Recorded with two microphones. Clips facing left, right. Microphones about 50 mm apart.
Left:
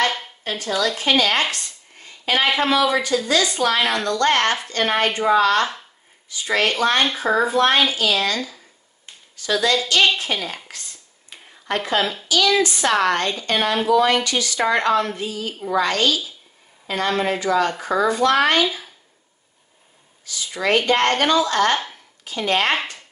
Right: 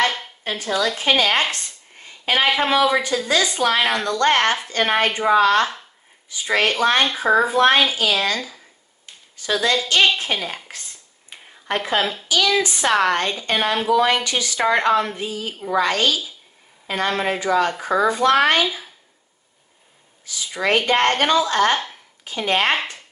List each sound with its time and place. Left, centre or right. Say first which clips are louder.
0.0 s a sound: right 1 dB; centre
0.4 s speech: right 1 dB; centre
1.1 s speech: even; right
1.5 s a sound: even; right
2.6 s speech: right 1 dB; centre
9.4 s speech: left 1 dB; right
11.2 s a sound: even; centre
12.0 s speech: even; centre
12.3 s speech: left 2 dB; right
20.2 s speech: even; centre